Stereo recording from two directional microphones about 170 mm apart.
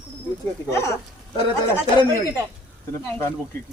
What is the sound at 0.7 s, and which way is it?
Speech, 15° left (ahead or behind).